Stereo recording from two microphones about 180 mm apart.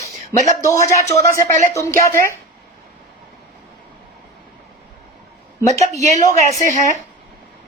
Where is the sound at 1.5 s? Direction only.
45° right (ahead or behind).